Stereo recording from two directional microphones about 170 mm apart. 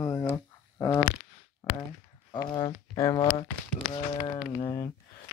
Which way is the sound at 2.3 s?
25° left (ahead or behind).